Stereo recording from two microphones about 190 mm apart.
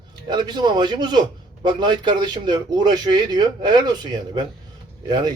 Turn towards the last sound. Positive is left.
turn(degrees=-20)  # may be behind; listen again after turning